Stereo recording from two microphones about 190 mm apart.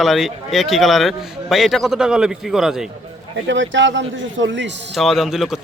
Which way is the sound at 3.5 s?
75° right (ahead or behind).